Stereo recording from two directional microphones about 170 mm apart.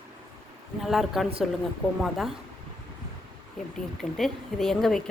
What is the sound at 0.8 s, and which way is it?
A woman's voice, centre (ahead or behind).